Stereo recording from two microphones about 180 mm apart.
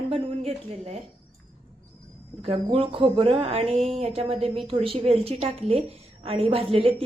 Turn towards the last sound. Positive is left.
turn(degrees=-30)  # may be behind; listen again after turning